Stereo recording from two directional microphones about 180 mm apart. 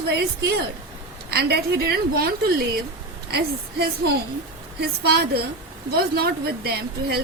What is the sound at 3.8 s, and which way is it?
A woman's voice, 60° right (ahead or behind).